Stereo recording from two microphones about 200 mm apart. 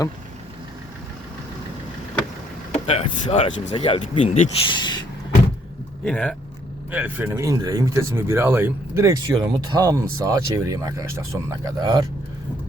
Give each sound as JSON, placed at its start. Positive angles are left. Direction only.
{"t": 2.7, "sound": "speech", "side_deg": 30}
{"t": 6.1, "sound": "speech", "side_deg": 5}
{"t": 6.9, "sound": "speech", "side_deg": -10}